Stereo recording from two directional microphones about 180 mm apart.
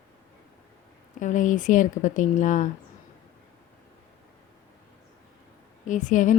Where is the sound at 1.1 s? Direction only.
45° left (ahead or behind).